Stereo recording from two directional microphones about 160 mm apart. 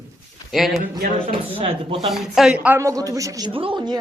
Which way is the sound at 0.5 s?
Centre (ahead or behind).